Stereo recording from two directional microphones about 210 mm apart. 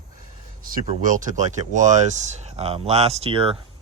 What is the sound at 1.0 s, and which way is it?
Speech, 40° right (ahead or behind).